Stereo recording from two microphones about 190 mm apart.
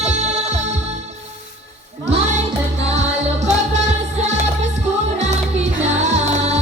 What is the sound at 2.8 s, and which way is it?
Music, 35° right (ahead or behind).